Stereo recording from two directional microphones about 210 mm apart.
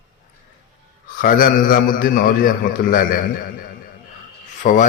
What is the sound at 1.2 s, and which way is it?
A man's voice, 40° left (ahead or behind).